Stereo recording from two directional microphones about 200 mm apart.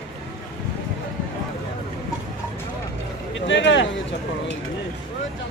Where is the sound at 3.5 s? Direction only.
65° left (ahead or behind).